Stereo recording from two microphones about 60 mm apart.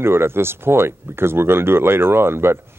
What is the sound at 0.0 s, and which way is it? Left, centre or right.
Speech, right.